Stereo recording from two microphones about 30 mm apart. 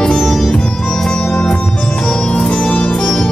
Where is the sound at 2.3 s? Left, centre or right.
Left.